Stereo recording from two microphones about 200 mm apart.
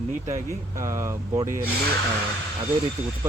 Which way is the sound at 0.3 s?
15° right (ahead or behind).